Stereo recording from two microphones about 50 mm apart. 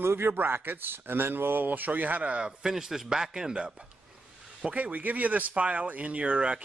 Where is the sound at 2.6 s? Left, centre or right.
Centre.